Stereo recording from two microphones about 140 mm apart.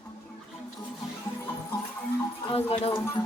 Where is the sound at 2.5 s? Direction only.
45° left (ahead or behind).